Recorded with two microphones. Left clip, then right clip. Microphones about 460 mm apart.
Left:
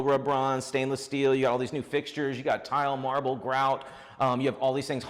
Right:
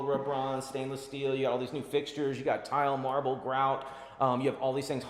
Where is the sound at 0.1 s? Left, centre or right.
Left.